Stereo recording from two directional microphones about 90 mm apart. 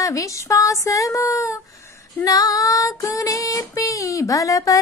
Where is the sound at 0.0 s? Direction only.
35° left (ahead or behind).